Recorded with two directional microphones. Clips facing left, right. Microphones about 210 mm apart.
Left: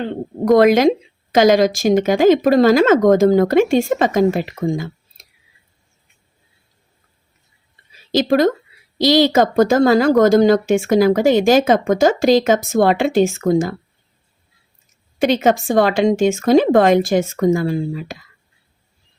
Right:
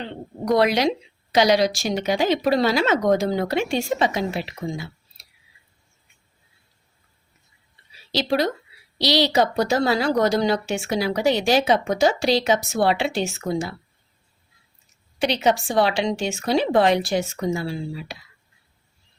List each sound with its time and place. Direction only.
0.0 s speech: 50° left (ahead or behind)
8.1 s speech: 50° left (ahead or behind)
15.2 s speech: 50° left (ahead or behind)